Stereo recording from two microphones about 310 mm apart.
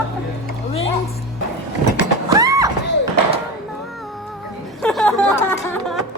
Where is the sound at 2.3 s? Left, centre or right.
Centre.